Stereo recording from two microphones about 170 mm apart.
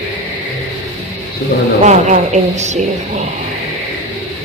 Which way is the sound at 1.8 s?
45° right (ahead or behind).